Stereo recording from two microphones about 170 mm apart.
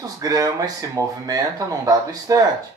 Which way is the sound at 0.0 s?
20° right (ahead or behind).